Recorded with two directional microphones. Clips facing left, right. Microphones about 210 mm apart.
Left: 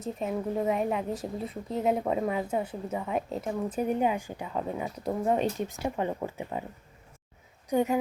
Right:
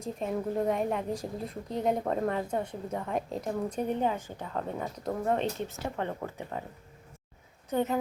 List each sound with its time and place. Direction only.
0.0 s a woman's voice: 5° left (ahead or behind)
7.7 s a woman's voice: 10° left (ahead or behind)